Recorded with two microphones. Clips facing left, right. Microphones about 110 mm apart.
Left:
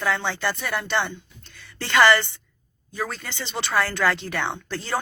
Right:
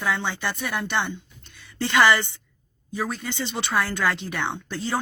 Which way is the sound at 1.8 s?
15° right (ahead or behind).